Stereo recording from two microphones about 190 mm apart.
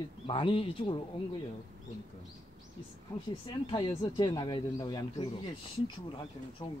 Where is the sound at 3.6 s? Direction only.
25° left (ahead or behind).